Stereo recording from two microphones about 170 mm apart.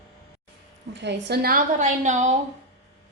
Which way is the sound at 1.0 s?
90° right.